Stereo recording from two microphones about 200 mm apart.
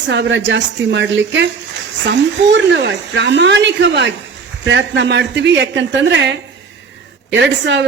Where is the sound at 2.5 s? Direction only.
65° right (ahead or behind).